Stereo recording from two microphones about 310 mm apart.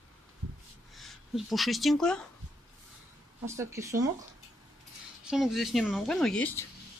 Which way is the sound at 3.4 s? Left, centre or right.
Centre.